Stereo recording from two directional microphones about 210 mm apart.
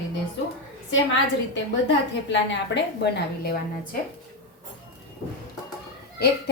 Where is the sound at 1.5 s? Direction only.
60° left (ahead or behind).